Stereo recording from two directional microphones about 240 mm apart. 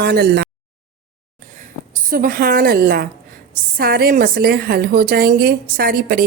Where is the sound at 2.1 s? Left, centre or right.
Right.